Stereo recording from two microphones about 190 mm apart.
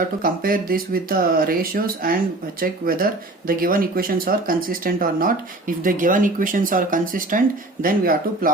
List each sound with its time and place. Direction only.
0.2 s speech: 50° right (ahead or behind)